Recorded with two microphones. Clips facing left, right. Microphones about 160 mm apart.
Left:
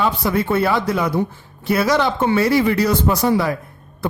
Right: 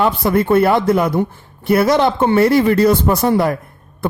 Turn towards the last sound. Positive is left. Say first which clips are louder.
# right 3 dB
turn(degrees=-55)  # may be behind; listen again after turning